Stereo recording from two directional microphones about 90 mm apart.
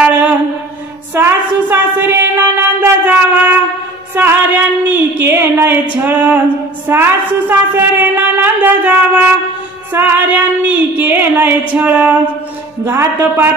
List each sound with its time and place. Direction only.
0.0 s mantra: 15° right (ahead or behind)
1.1 s a sound: 25° right (ahead or behind)
6.9 s a woman's voice: 25° right (ahead or behind)